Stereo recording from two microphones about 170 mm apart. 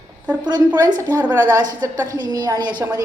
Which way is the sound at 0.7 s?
15° right (ahead or behind).